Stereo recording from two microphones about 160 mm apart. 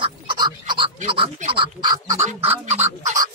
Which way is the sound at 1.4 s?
30° right (ahead or behind).